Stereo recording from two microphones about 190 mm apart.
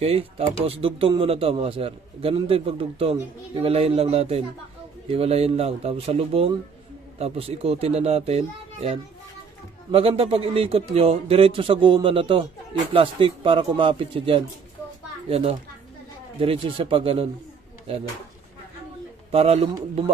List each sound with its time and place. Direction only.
0.0 s a man's voice: 30° right (ahead or behind)
9.8 s a man's voice: 30° right (ahead or behind)
19.3 s a man's voice: 30° right (ahead or behind)